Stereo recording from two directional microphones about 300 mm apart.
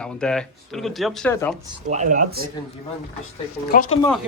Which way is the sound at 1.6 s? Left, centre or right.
Right.